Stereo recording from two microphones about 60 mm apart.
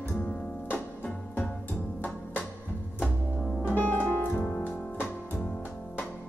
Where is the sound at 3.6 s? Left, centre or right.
Left.